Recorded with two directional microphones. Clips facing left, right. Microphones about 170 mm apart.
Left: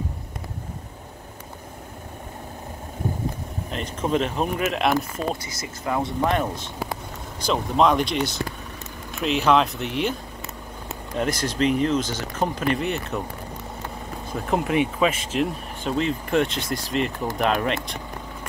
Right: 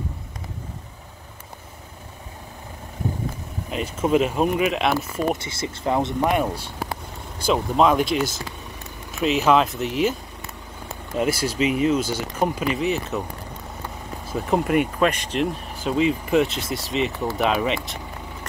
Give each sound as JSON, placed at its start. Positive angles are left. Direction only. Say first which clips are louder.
{"t": 3.7, "sound": "speech", "louder": "right 4 dB", "side_deg": -5}
{"t": 5.3, "sound": "speech", "louder": "right 4 dB", "side_deg": -25}
{"t": 6.2, "sound": "speech", "louder": "right 2 dB", "side_deg": -10}
{"t": 14.2, "sound": "speech", "louder": "right 2 dB", "side_deg": 0}